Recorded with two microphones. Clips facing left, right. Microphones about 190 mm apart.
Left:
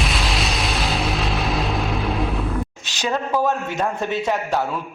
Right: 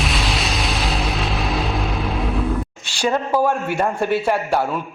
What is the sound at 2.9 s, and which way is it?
A man's voice, 10° right (ahead or behind).